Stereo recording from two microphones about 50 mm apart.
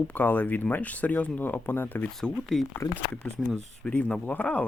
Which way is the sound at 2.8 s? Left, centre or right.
Left.